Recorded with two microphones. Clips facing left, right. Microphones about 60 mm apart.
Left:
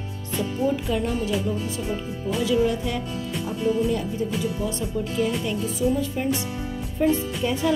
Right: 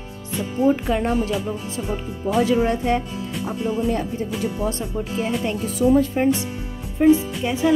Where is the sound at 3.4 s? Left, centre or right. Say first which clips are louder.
Even; right.